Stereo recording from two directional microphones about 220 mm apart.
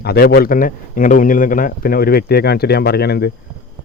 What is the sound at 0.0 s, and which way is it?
A man's voice, 45° left (ahead or behind).